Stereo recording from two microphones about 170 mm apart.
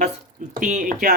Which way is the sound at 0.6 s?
50° right (ahead or behind).